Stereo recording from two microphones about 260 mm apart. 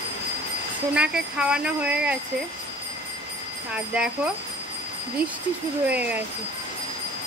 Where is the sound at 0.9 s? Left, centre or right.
Centre.